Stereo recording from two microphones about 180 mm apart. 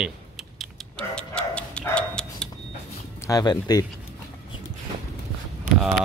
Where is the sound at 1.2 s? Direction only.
5° left (ahead or behind).